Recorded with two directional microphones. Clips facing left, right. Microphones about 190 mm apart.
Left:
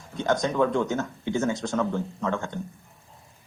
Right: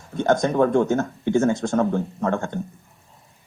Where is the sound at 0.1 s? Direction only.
50° right (ahead or behind).